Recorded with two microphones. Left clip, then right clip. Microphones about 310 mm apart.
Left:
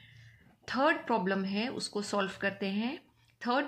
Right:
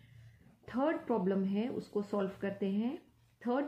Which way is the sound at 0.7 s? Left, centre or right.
Centre.